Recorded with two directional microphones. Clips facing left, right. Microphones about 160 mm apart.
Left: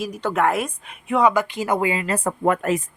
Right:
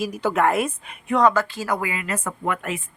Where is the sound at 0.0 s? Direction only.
5° right (ahead or behind).